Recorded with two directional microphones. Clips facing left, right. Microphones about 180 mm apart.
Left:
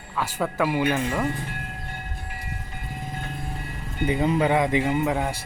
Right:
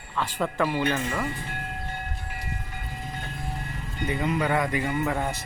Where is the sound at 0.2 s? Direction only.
5° left (ahead or behind).